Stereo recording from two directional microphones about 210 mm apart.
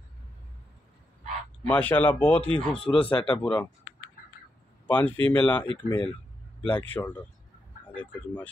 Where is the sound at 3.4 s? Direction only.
5° left (ahead or behind).